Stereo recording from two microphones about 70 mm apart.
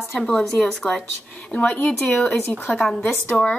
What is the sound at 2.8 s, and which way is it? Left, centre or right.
Speech, centre.